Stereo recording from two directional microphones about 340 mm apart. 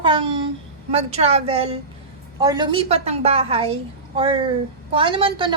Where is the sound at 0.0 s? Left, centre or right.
Centre.